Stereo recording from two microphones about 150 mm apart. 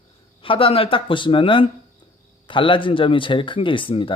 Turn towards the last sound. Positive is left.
turn(degrees=35)  # may be behind; listen again after turning